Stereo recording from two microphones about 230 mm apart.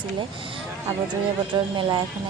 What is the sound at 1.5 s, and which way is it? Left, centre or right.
Speech, centre.